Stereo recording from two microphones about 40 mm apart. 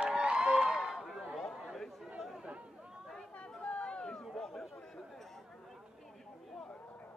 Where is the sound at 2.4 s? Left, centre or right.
Right.